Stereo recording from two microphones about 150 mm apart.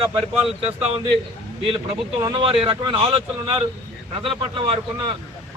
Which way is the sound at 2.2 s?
30° right (ahead or behind).